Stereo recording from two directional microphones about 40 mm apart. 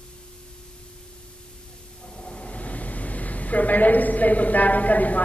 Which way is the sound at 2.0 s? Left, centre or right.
Left.